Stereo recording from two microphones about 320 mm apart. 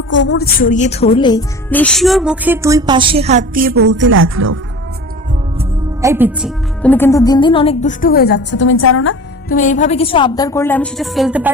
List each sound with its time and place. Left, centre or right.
0.1 s a woman's voice: left; by 4.6 s right
5.5 s music: centre
6.8 s a woman's voice: centre; by 9.1 s left
9.5 s a woman's voice: left; by 11.5 s centre